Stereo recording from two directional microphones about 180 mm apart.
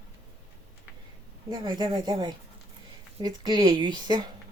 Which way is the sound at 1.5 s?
25° right (ahead or behind).